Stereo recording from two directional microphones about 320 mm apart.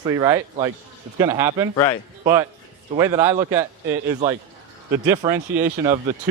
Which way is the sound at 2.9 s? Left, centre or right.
Centre.